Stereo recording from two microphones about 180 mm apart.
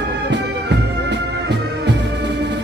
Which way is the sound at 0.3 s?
75° right (ahead or behind).